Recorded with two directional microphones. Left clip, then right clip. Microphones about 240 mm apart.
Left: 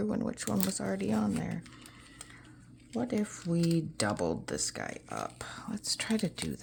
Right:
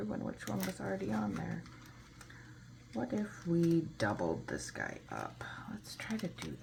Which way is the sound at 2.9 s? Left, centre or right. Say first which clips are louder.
Left 5 dB; left.